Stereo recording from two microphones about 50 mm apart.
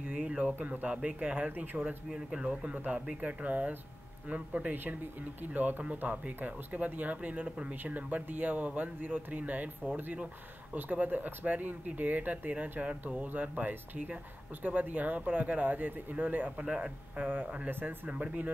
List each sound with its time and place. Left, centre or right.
0.4 s speech: right
2.0 s speech: centre
2.6 s speech: right
16.6 s speech: centre
17.2 s speech: right